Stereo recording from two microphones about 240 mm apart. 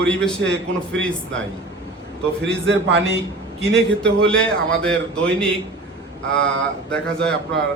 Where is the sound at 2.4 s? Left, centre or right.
Right.